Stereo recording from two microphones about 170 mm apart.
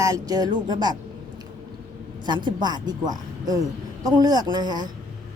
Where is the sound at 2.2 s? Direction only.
25° right (ahead or behind).